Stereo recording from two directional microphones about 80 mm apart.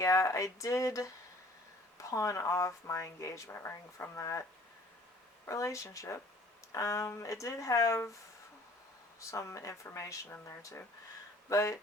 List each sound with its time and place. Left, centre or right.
0.0 s speech: left
5.5 s speech: left
9.3 s speech: left